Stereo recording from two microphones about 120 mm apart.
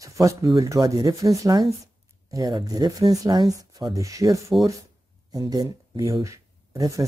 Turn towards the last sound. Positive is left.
turn(degrees=-25)  # may be behind; listen again after turning